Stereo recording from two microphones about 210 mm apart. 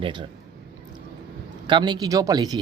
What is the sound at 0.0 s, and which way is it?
Speech, 20° right (ahead or behind).